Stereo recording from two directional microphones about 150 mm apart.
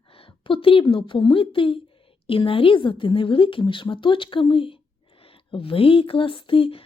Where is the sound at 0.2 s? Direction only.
35° left (ahead or behind).